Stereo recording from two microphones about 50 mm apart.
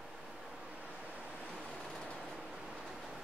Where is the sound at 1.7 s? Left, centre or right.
Centre.